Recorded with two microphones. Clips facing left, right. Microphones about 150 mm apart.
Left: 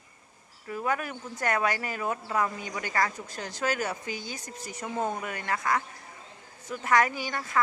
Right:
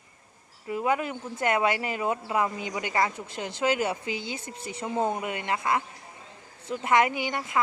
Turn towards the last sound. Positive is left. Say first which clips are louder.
# right 3 dB
turn(degrees=-20)  # may be behind; listen again after turning